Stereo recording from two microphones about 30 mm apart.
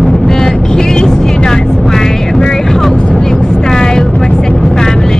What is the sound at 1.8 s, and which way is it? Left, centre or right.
Music, centre.